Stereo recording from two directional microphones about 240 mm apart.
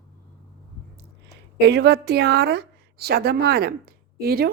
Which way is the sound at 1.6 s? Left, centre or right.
Right.